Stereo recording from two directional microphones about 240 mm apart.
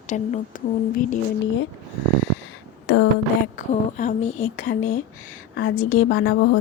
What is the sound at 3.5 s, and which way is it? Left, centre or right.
Speech, left.